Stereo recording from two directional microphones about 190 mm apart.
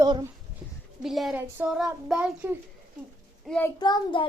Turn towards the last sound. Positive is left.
turn(degrees=25)  # may be behind; listen again after turning